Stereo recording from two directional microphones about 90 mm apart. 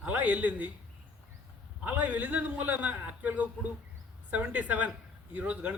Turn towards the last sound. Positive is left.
turn(degrees=-20)  # may be behind; listen again after turning